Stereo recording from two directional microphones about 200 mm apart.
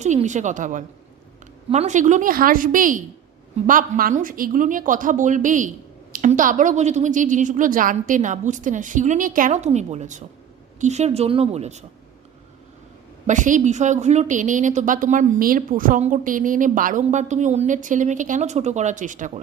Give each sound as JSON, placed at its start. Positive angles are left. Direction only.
{"t": 0.0, "sound": "a woman's voice", "side_deg": -35}
{"t": 13.2, "sound": "a woman's voice", "side_deg": -40}